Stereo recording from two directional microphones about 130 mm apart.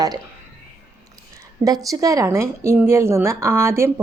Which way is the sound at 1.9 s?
25° right (ahead or behind).